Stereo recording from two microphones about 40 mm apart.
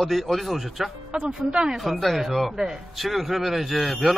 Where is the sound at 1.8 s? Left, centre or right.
Centre.